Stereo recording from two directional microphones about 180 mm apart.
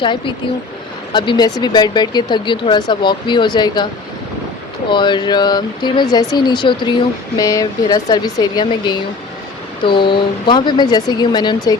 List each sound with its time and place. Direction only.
0.0 s speech: 25° left (ahead or behind)
4.9 s speech: 25° left (ahead or behind)